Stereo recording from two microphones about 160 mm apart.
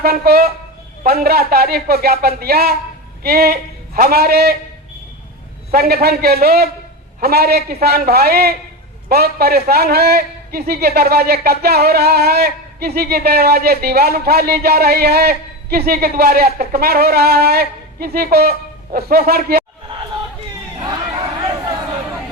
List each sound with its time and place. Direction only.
0.0 s speech: 75° right (ahead or behind)
5.7 s a man's voice: 75° right (ahead or behind)